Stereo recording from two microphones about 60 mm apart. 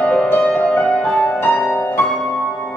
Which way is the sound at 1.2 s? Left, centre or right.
Left.